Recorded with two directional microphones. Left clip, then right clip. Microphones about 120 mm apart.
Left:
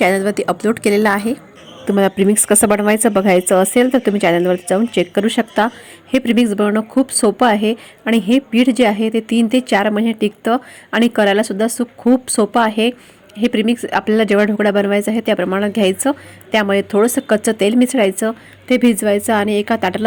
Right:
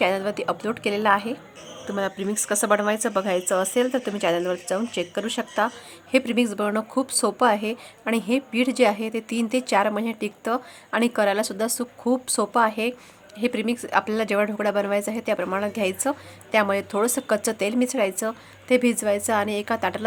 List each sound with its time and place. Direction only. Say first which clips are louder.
0.0 s speech: left 8 dB; 30° left (ahead or behind)